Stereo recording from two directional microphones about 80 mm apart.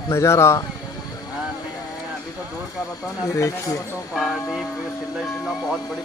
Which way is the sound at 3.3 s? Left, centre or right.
Left.